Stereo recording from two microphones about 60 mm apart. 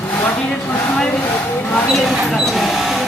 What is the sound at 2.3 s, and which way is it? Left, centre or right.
Printer, centre.